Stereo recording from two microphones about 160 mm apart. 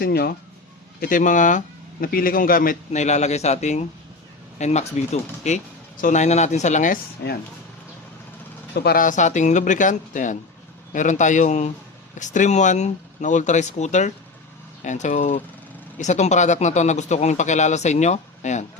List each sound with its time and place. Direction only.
0.0 s speech: 75° left (ahead or behind)
0.9 s a man's voice: 60° left (ahead or behind)
7.2 s speech: 80° left
8.7 s a man's voice: 80° left; by 18.6 s 45° left (ahead or behind)